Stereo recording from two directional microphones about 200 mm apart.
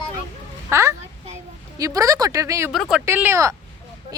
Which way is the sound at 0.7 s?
15° right (ahead or behind).